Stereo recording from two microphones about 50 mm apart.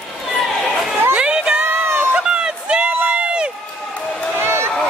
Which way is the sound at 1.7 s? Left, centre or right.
Right.